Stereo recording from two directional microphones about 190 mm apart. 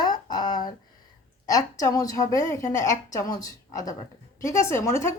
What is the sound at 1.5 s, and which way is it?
A woman's voice, 20° left (ahead or behind).